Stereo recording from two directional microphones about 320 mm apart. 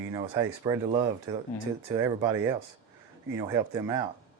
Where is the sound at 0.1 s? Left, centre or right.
Centre.